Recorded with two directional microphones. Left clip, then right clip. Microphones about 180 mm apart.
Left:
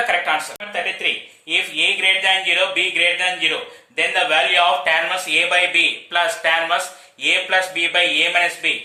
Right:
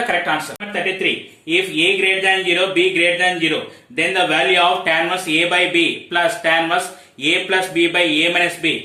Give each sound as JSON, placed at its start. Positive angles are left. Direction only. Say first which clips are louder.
{"t": 0.1, "sound": "speech", "louder": "even", "side_deg": 25}